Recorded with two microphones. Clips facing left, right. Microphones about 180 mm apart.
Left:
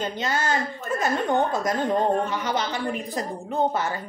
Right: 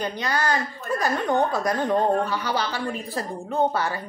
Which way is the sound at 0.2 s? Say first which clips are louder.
Even; 20° left (ahead or behind).